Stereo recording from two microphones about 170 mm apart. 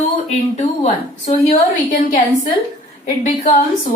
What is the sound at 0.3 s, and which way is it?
A woman's voice, 40° left (ahead or behind).